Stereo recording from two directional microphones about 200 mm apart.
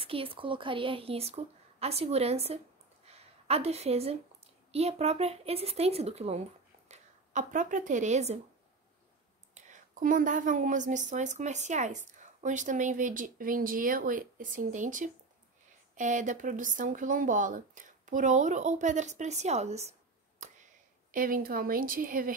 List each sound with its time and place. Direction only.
0.0 s a woman's voice: 25° right (ahead or behind)
9.5 s a woman's voice: 40° right (ahead or behind)